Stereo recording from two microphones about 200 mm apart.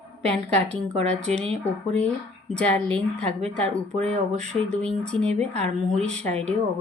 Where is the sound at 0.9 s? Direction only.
35° right (ahead or behind).